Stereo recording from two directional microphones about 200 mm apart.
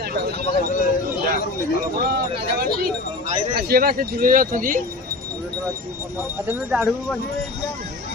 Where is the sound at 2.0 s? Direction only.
50° right (ahead or behind).